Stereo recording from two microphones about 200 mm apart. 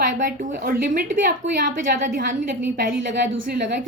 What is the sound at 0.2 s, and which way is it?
A woman's voice, 45° right (ahead or behind).